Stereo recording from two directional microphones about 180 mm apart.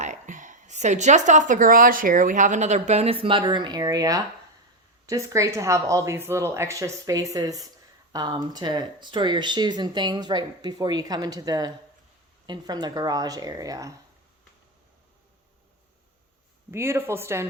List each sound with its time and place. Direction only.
0.0 s a woman's voice: 45° right (ahead or behind); by 13.9 s 20° right (ahead or behind)
16.7 s speech: 15° right (ahead or behind)